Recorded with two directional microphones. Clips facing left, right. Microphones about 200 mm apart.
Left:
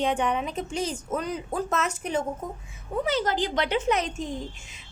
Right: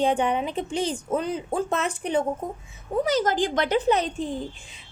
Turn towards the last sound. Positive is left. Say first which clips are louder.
# right 3 dB
turn(degrees=-35)  # may be behind; listen again after turning